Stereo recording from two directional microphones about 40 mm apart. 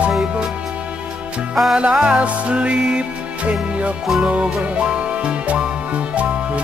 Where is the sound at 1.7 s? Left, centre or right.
Right.